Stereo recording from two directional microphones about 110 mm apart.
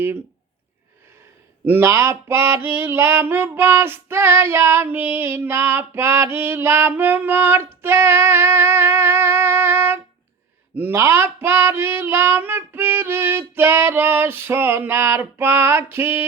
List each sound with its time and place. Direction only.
1.6 s mantra: 20° right (ahead or behind)